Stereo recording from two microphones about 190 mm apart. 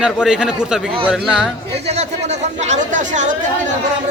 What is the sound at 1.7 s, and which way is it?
Speech, 35° right (ahead or behind).